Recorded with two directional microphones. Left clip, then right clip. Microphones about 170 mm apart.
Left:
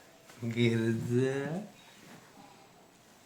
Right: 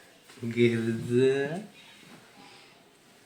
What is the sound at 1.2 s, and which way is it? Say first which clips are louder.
Speech: right 9 dB; 50° left (ahead or behind).